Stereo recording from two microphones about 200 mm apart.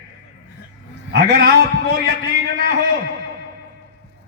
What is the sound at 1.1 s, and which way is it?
A man's voice, 50° right (ahead or behind).